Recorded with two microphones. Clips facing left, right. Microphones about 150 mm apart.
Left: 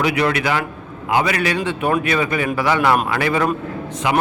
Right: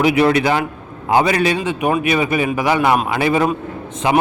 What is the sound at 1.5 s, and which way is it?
A man's voice, 15° right (ahead or behind).